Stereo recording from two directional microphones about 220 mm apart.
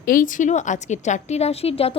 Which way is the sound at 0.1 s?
35° left (ahead or behind).